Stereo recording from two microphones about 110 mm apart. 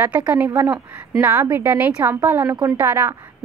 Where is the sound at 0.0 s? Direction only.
15° right (ahead or behind).